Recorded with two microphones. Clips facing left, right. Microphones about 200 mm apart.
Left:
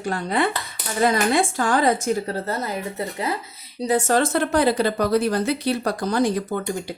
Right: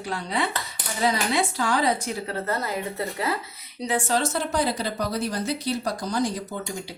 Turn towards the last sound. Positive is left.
turn(degrees=60)  # may be behind; listen again after turning